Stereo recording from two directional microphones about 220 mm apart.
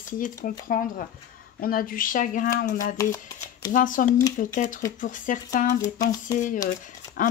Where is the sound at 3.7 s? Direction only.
40° left (ahead or behind).